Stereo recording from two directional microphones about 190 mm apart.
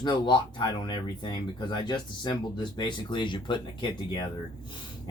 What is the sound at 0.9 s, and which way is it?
Speech, 25° left (ahead or behind).